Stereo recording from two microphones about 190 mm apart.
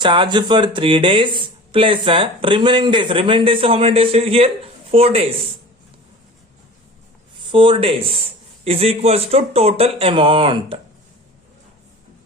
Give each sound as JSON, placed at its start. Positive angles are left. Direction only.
{"t": 0.0, "sound": "speech", "side_deg": -25}
{"t": 7.5, "sound": "speech", "side_deg": -25}